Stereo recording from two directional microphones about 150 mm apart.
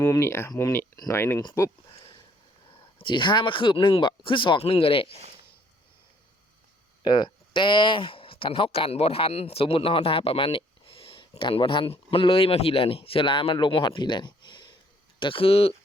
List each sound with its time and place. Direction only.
0.0 s speech: 20° left (ahead or behind)
2.6 s speech: 35° left (ahead or behind)
7.0 s speech: 30° left (ahead or behind)